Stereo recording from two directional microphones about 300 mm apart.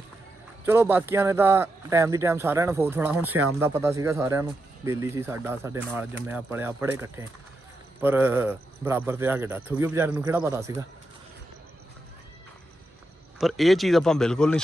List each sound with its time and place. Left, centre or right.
0.7 s speech: centre
3.3 s speech: right
3.5 s speech: centre
13.4 s speech: centre